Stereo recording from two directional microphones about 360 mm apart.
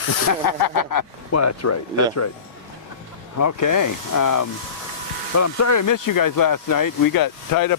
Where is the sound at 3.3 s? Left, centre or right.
Left.